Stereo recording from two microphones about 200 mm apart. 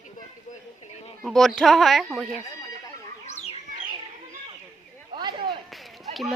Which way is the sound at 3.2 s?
35° left (ahead or behind).